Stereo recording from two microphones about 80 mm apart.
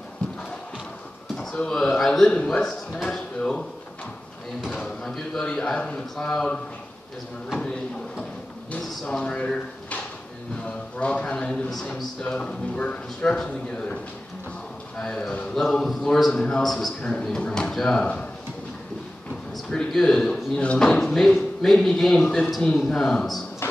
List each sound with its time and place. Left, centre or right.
1.3 s a man's voice: centre
4.6 s a man's voice: centre
8.7 s drawer open or close: centre
10.6 s a man's voice: centre
15.0 s a man's voice: centre
19.7 s a man's voice: centre
23.6 s music: left